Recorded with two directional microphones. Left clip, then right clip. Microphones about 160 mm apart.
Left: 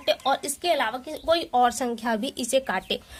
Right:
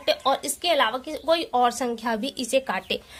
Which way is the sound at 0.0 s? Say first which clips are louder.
Right 1 dB; 30° left (ahead or behind).